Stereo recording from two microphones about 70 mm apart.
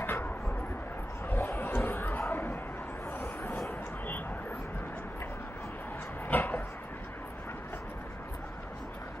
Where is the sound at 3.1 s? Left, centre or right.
Left.